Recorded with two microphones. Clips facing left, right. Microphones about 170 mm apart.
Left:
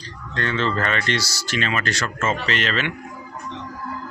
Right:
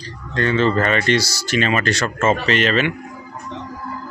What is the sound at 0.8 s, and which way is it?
Speech, 10° right (ahead or behind).